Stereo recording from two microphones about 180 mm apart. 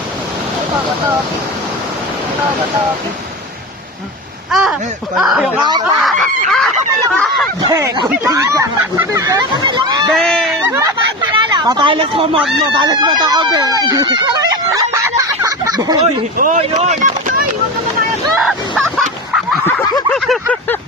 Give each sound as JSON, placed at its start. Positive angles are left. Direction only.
{"t": 4.5, "sound": "speech", "side_deg": 0}
{"t": 5.5, "sound": "speech", "side_deg": -25}
{"t": 5.8, "sound": "speech", "side_deg": 0}
{"t": 6.5, "sound": "a sound", "side_deg": 0}
{"t": 7.6, "sound": "speech", "side_deg": -20}
{"t": 10.1, "sound": "speech", "side_deg": 0}
{"t": 10.9, "sound": "speech", "side_deg": -25}
{"t": 12.4, "sound": "speech", "side_deg": 0}
{"t": 12.7, "sound": "speech", "side_deg": -25}
{"t": 16.4, "sound": "speech", "side_deg": -40}
{"t": 18.3, "sound": "speech", "side_deg": 0}
{"t": 19.6, "sound": "snicker", "side_deg": 20}
{"t": 20.1, "sound": "speech", "side_deg": 0}